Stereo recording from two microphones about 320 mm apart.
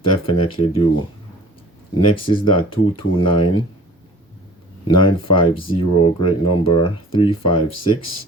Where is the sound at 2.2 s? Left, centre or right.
Centre.